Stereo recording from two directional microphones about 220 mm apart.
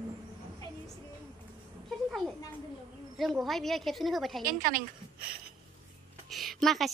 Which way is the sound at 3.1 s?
Centre (ahead or behind).